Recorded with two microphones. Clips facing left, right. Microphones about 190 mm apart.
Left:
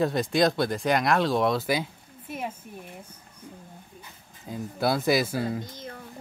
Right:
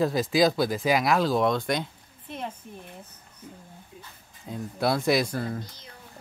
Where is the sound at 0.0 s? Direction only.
Centre (ahead or behind).